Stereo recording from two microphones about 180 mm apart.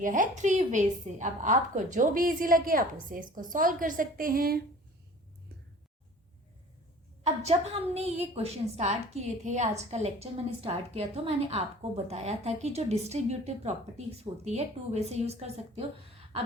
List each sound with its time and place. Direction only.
0.0 s a woman's voice: 45° right (ahead or behind)
7.4 s a woman's voice: 35° right (ahead or behind)